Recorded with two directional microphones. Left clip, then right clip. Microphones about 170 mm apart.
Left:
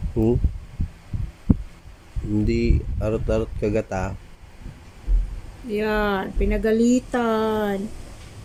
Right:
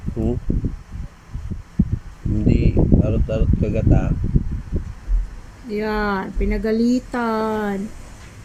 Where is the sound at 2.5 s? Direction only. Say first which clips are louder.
Right 5 dB; 35° left (ahead or behind).